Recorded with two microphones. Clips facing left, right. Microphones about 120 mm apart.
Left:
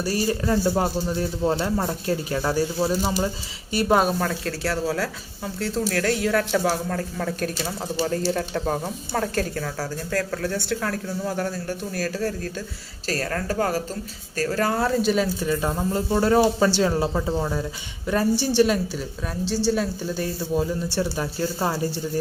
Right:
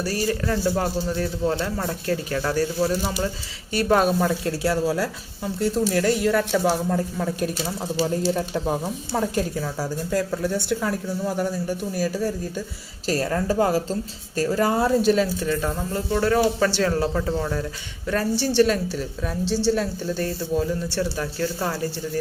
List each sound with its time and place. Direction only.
0.0 s speech: 20° left (ahead or behind)
4.2 s speech: 10° right (ahead or behind)
15.0 s speech: centre (ahead or behind)
15.9 s speech: 25° left (ahead or behind); by 20.2 s 5° left (ahead or behind)
20.6 s speech: 20° left (ahead or behind)